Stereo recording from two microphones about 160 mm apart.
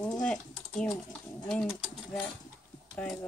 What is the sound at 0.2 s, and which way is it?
Typing, 5° left (ahead or behind).